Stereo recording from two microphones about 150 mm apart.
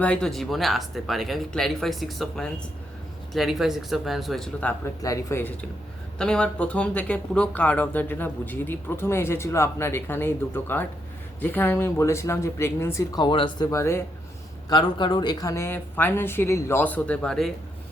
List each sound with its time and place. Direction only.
0.0 s speech: 5° left (ahead or behind)
5.0 s speech: 20° left (ahead or behind)
13.7 s speech: 20° left (ahead or behind)
14.7 s speech: 30° left (ahead or behind); by 17.5 s 5° left (ahead or behind)